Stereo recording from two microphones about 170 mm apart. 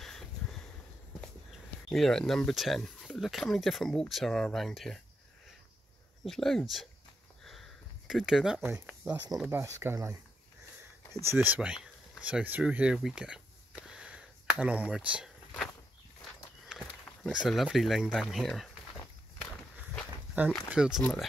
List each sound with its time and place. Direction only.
0.0 s a sound: centre (ahead or behind)
1.9 s speech: 5° left (ahead or behind)
6.2 s speech: centre (ahead or behind)
7.4 s a sound: centre (ahead or behind)
8.7 s speech: 10° right (ahead or behind)
9.1 s speech: 25° right (ahead or behind)
11.2 s a sound: 10° right (ahead or behind)
16.6 s speech: centre (ahead or behind)
20.7 s speech: 5° right (ahead or behind)